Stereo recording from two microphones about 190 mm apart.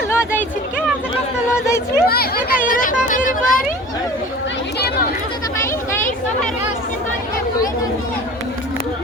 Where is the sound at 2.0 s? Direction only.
55° left (ahead or behind).